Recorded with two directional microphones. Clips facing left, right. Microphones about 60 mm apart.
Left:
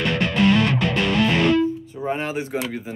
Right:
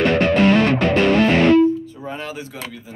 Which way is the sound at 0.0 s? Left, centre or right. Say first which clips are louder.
Right 5 dB; right.